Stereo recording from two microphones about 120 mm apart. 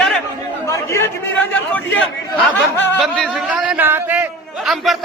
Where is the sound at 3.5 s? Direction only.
5° right (ahead or behind).